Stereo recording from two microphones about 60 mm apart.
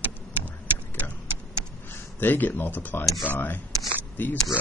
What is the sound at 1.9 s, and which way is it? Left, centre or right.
Speech, left.